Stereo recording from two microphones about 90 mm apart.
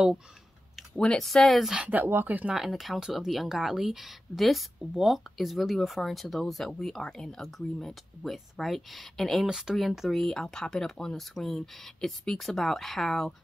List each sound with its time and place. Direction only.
0.7 s speech: 5° left (ahead or behind)
1.8 s speech: 20° right (ahead or behind)
2.5 s speech: centre (ahead or behind)